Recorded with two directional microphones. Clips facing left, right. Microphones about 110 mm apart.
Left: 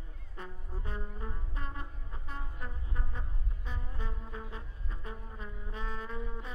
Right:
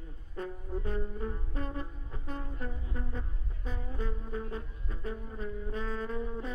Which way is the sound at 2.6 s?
40° right (ahead or behind).